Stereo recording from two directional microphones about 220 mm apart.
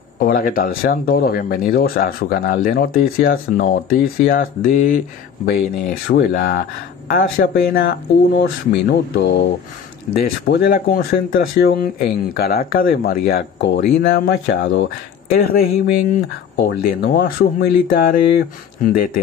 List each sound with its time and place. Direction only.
0.2 s speech: 40° left (ahead or behind)
10.5 s speech: 45° left (ahead or behind)
14.5 s speech: 55° left (ahead or behind)
15.3 s speech: 45° left (ahead or behind)